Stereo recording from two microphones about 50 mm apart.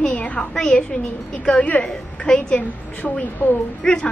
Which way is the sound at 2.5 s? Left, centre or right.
Left.